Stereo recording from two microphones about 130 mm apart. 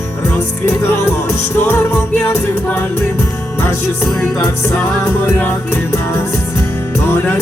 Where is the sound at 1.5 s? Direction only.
15° left (ahead or behind).